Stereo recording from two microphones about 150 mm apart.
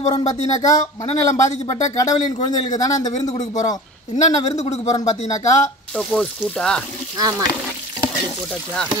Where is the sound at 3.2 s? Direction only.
25° left (ahead or behind).